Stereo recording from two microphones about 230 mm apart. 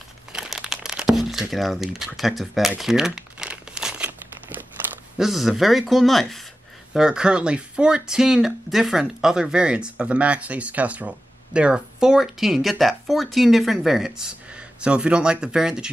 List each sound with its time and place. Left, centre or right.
0.3 s crumpling: centre
5.1 s speech: centre